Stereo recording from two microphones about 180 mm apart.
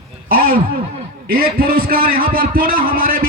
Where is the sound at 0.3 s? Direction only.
55° right (ahead or behind).